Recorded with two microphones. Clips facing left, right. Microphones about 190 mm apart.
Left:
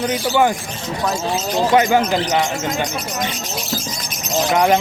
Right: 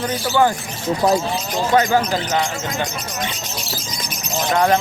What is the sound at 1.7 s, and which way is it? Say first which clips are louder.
Speech: left 1 dB; 15° left (ahead or behind).